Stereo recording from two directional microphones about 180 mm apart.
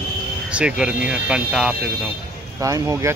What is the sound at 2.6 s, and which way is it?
Speech, 20° right (ahead or behind).